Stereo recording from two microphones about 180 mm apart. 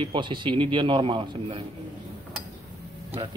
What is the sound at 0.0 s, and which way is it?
A man's voice, 25° right (ahead or behind).